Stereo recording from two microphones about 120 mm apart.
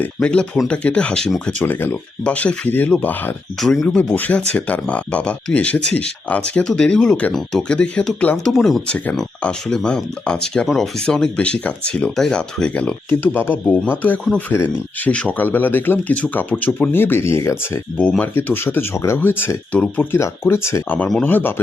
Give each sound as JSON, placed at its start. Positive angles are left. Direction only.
{"t": 0.0, "sound": "speech", "side_deg": 10}
{"t": 1.6, "sound": "speech", "side_deg": 15}
{"t": 3.6, "sound": "speech", "side_deg": 0}
{"t": 3.8, "sound": "speech", "side_deg": 15}